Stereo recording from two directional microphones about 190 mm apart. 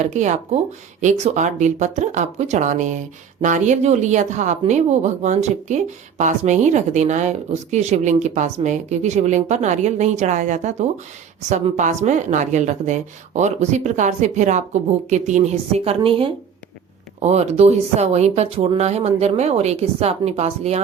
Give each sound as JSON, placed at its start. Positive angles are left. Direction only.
{"t": 0.0, "sound": "speech", "side_deg": -40}